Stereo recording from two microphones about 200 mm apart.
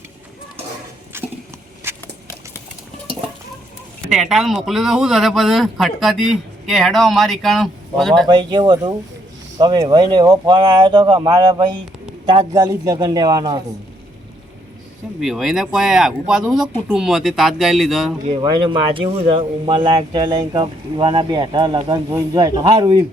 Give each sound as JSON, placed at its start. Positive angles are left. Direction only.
{"t": 1.1, "sound": "a sound", "side_deg": -10}
{"t": 1.8, "sound": "walk", "side_deg": -10}
{"t": 4.1, "sound": "a man's voice", "side_deg": 0}
{"t": 8.3, "sound": "speech", "side_deg": -25}
{"t": 15.2, "sound": "a man's voice", "side_deg": 0}
{"t": 18.4, "sound": "speech", "side_deg": -25}